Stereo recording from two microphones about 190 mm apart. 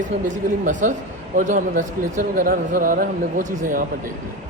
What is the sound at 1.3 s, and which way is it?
A man's voice, 40° right (ahead or behind).